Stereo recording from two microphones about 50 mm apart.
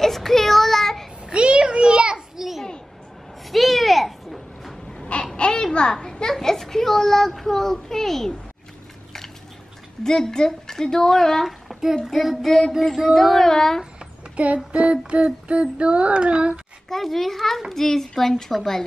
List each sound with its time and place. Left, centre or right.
0.0 s child singing: centre
1.3 s a sound: right; by 5.0 s centre
5.2 s a sound: centre
10.0 s speech: centre
11.9 s child singing: centre
14.3 s child singing: right
16.9 s child singing: centre
17.6 s a child's voice: centre